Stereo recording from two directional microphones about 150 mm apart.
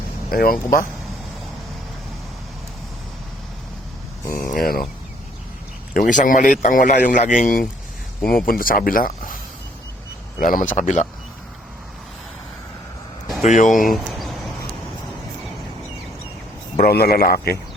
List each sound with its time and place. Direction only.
0.3 s speech: 85° left
4.4 s speech: 70° left (ahead or behind)
5.9 s speech: 60° left (ahead or behind)
8.2 s speech: 80° left
10.4 s speech: 60° left (ahead or behind)
13.4 s speech: 55° left (ahead or behind)
13.8 s speech: centre (ahead or behind)
16.7 s a man's voice: 75° left (ahead or behind)